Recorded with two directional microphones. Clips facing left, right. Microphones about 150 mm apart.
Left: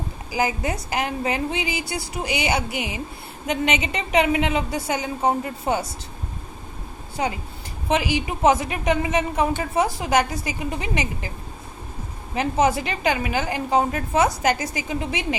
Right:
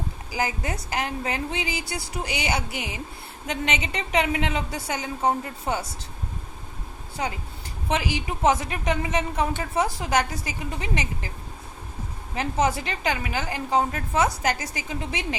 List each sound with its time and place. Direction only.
0.3 s a woman's voice: 15° left (ahead or behind)
7.9 s a woman's voice: 15° left (ahead or behind)
12.3 s a woman's voice: 15° left (ahead or behind)